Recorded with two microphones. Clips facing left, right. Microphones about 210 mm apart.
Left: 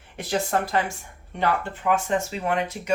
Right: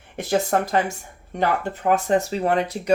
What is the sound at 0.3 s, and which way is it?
Speech, 45° right (ahead or behind).